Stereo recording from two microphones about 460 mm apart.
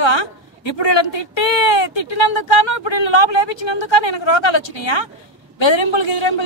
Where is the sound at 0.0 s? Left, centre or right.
Left.